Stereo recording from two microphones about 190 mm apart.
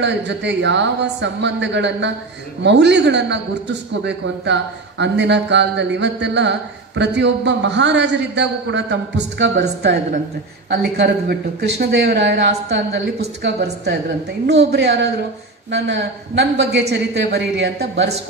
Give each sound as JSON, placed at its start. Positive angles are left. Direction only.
{"t": 0.0, "sound": "a man's voice", "side_deg": -65}